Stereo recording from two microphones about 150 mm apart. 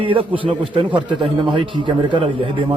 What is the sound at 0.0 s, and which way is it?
A man's voice, 35° right (ahead or behind).